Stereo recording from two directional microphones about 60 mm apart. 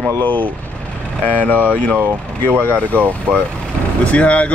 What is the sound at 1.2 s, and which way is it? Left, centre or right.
Speech, left.